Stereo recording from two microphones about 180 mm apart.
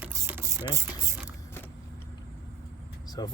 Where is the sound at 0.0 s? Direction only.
15° right (ahead or behind).